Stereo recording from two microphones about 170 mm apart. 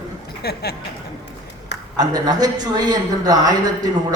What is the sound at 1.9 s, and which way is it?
A man's voice, 25° right (ahead or behind).